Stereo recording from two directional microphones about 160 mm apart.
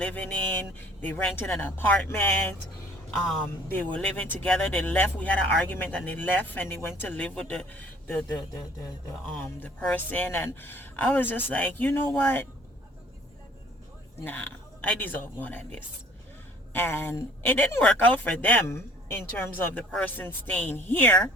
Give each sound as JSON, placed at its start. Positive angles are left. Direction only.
{"t": 0.0, "sound": "speech", "side_deg": 10}
{"t": 3.9, "sound": "speech", "side_deg": 10}
{"t": 9.4, "sound": "speech", "side_deg": 10}
{"t": 14.3, "sound": "speech", "side_deg": 10}